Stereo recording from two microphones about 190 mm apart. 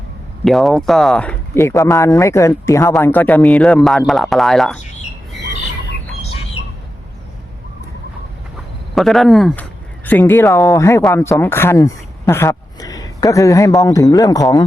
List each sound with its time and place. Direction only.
0.4 s a man's voice: centre (ahead or behind)
9.0 s a man's voice: centre (ahead or behind); by 14.4 s 20° left (ahead or behind)